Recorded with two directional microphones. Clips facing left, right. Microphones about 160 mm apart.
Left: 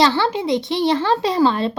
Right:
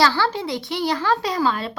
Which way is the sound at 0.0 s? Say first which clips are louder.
Left 3 dB; 20° left (ahead or behind).